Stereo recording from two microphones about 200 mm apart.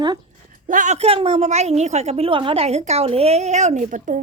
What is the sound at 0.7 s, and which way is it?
A woman's voice, 40° right (ahead or behind).